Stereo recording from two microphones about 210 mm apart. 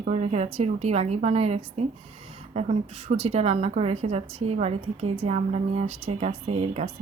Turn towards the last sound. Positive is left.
turn(degrees=-30)  # may be behind; listen again after turning